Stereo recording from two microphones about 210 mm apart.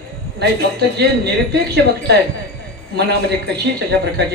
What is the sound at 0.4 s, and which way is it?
Music, 50° right (ahead or behind).